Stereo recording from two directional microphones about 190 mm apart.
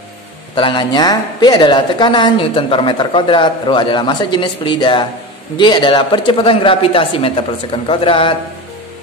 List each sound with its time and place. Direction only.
0.6 s a woman's voice: 25° left (ahead or behind)